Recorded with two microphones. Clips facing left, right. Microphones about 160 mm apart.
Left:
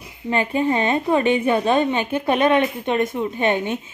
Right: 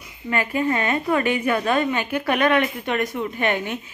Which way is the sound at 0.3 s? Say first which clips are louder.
Left 2 dB; 25° left (ahead or behind).